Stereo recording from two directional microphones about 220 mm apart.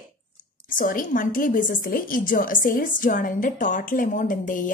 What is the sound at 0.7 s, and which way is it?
A woman's voice, 40° left (ahead or behind).